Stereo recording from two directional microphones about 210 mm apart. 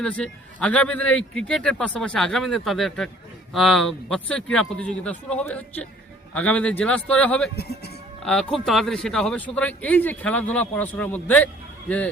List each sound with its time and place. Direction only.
0.0 s a man's voice: 5° left (ahead or behind)
7.5 s speech: 50° left (ahead or behind)
8.2 s speech: 5° left (ahead or behind)